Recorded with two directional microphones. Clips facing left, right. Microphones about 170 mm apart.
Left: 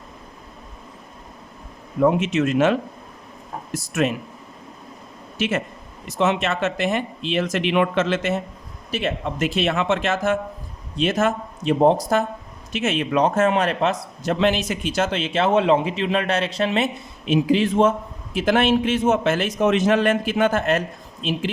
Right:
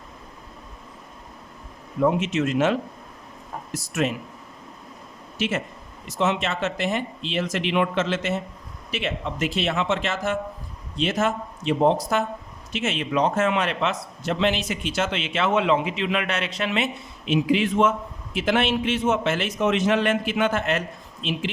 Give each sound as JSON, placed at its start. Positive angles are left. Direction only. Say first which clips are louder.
{"t": 2.0, "sound": "speech", "louder": "left 3 dB", "side_deg": 60}
{"t": 5.4, "sound": "speech", "louder": "left 3 dB", "side_deg": 55}
{"t": 8.9, "sound": "a man's voice", "louder": "left 4 dB", "side_deg": 40}